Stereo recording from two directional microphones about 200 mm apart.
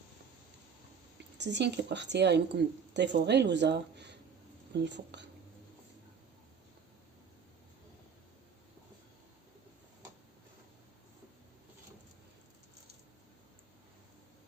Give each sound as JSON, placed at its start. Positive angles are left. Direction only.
{"t": 1.4, "sound": "speech", "side_deg": -60}